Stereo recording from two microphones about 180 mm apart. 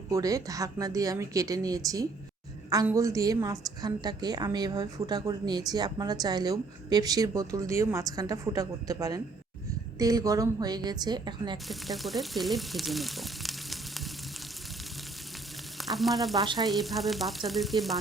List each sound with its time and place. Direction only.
0.1 s a woman's voice: 20° right (ahead or behind)
11.5 s speech: centre (ahead or behind)
15.8 s speech: centre (ahead or behind)
16.4 s a woman's voice: 25° right (ahead or behind)
16.6 s frying: centre (ahead or behind)